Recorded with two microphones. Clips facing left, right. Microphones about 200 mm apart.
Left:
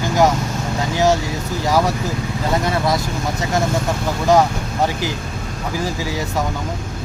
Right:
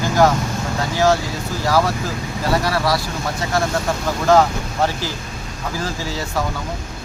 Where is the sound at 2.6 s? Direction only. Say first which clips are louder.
Left 1 dB; 20° left (ahead or behind).